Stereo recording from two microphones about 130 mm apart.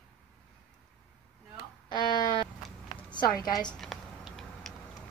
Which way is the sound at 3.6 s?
Centre (ahead or behind).